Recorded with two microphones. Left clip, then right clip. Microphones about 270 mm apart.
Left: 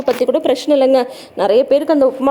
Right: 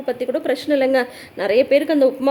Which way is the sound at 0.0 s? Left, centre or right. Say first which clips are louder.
Left 7 dB; left.